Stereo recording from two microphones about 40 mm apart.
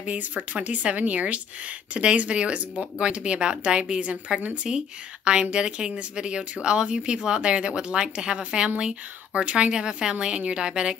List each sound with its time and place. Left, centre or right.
0.0 s speech: right